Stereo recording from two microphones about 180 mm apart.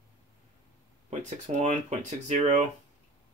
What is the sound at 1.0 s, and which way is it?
Speech, 40° right (ahead or behind).